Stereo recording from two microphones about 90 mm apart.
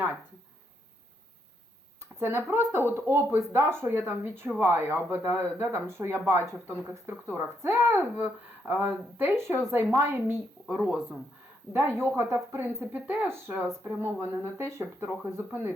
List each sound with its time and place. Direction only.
2.1 s speech: 25° right (ahead or behind)
10.7 s speech: 15° right (ahead or behind)
11.7 s speech: 25° right (ahead or behind)